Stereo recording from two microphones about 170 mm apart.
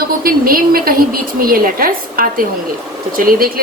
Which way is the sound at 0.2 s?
60° right (ahead or behind).